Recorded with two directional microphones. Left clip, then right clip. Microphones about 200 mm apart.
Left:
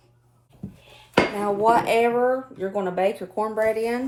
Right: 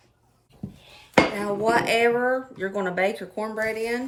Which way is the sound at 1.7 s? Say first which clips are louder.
Right 1 dB; 5° left (ahead or behind).